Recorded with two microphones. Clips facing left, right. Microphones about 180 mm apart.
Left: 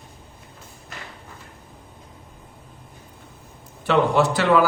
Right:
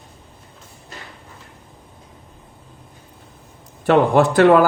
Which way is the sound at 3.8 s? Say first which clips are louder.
Right 4 dB; 50° right (ahead or behind).